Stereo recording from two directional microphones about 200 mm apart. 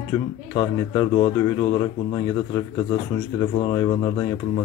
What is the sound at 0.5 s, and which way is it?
Speech, 25° left (ahead or behind).